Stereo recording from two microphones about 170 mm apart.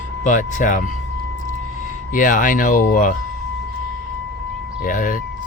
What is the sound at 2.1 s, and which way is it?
Speech, 50° left (ahead or behind).